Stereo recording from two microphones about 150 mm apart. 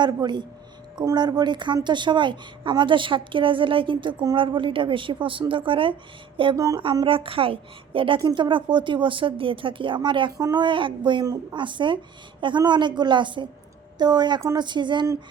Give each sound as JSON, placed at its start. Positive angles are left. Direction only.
{"t": 0.0, "sound": "a woman's voice", "side_deg": -30}
{"t": 6.3, "sound": "a sound", "side_deg": -35}
{"t": 6.6, "sound": "a woman's voice", "side_deg": -20}
{"t": 6.8, "sound": "a woman's voice", "side_deg": -35}